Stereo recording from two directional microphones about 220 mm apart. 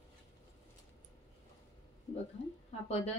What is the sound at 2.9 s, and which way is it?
Speech, 30° left (ahead or behind).